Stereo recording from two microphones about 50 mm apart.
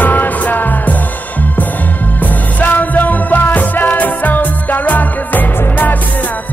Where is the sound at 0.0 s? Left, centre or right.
Left.